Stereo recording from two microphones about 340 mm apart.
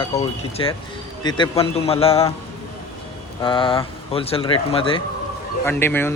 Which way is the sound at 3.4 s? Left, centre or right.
Centre.